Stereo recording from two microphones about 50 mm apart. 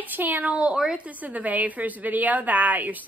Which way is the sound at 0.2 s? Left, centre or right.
Right.